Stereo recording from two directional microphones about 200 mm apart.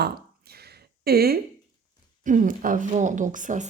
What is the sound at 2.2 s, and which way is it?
Speech, 40° right (ahead or behind).